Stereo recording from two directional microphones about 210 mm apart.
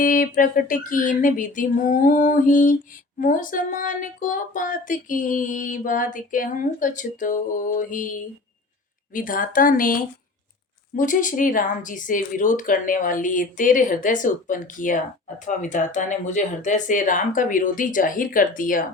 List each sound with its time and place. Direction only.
0.0 s music: 40° left (ahead or behind)